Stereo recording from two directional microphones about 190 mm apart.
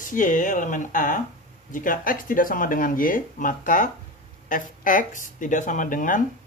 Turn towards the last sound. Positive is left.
turn(degrees=45)  # may be behind; listen again after turning